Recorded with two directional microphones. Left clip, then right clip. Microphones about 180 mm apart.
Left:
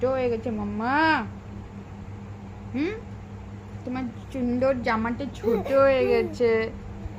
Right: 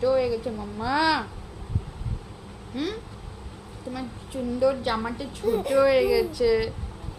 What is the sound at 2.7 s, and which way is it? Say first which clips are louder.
Speech: left 2 dB; centre (ahead or behind).